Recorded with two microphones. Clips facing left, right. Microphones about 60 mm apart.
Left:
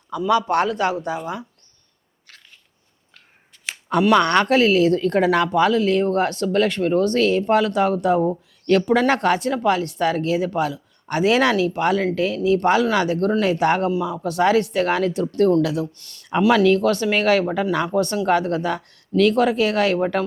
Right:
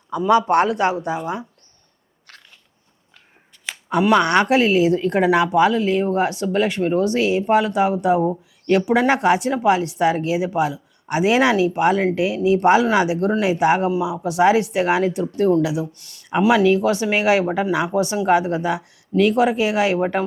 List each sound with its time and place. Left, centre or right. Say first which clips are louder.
0.1 s speech: right 3 dB; right
3.8 s speech: even; centre